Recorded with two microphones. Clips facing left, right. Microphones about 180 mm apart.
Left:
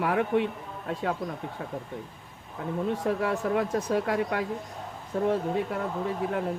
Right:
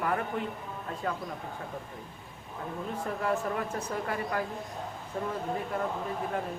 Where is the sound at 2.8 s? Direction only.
80° left.